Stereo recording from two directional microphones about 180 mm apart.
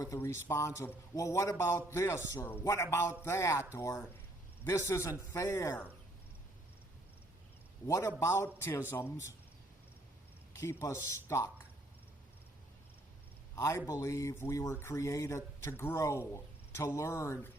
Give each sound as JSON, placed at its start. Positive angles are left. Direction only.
{"t": 0.0, "sound": "a man's voice", "side_deg": 15}
{"t": 7.9, "sound": "a man's voice", "side_deg": 15}
{"t": 10.5, "sound": "a man's voice", "side_deg": 15}
{"t": 13.6, "sound": "a man's voice", "side_deg": 15}